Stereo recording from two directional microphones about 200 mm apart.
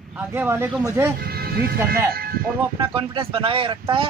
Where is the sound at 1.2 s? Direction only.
50° right (ahead or behind).